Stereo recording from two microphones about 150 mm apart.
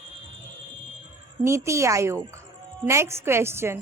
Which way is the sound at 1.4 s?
20° right (ahead or behind).